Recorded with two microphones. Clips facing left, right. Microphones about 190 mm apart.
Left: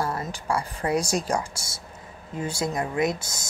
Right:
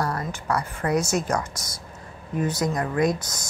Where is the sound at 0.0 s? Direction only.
25° left (ahead or behind).